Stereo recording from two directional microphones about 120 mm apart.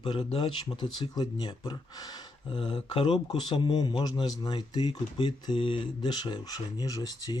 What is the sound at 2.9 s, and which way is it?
Speech, 45° left (ahead or behind).